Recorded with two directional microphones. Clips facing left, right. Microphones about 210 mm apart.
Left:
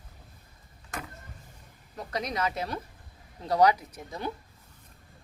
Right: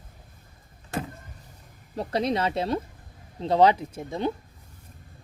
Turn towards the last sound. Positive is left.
turn(degrees=-25)  # may be behind; listen again after turning